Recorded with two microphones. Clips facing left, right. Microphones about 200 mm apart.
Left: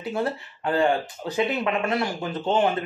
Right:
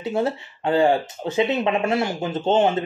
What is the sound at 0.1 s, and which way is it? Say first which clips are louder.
Speech: right 3 dB; 25° right (ahead or behind).